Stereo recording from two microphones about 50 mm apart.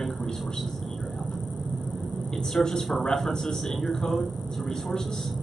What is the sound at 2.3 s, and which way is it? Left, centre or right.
A man's voice, centre.